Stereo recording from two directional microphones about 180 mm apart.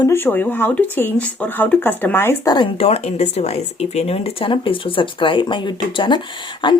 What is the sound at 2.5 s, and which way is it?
Speech, 30° left (ahead or behind).